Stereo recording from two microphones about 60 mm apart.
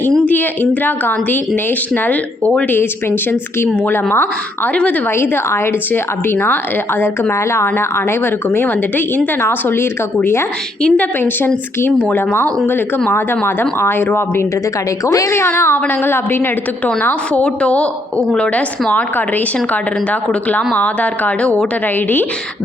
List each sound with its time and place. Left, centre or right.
0.3 s a woman's voice: left
2.6 s a woman's voice: left
4.7 s a woman's voice: left
5.1 s a woman's voice: left
10.8 s a woman's voice: left
12.1 s a woman's voice: left
15.0 s a woman's voice: left
15.3 s a woman's voice: left
20.7 s a woman's voice: left